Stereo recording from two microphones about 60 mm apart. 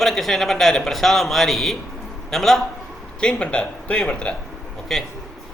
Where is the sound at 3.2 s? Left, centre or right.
Centre.